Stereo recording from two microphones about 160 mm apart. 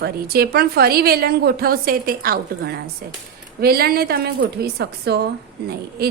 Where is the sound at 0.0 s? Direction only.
75° right (ahead or behind).